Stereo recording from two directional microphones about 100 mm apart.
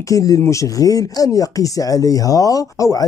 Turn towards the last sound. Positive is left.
turn(degrees=35)  # may be behind; listen again after turning